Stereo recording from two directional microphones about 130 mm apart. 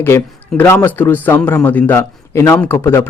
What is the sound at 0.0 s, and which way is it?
A man's voice, 15° left (ahead or behind).